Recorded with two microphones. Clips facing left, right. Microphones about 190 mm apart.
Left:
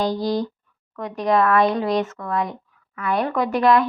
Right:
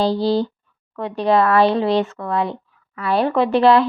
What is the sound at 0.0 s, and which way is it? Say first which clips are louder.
Speech: right 4 dB; 30° right (ahead or behind).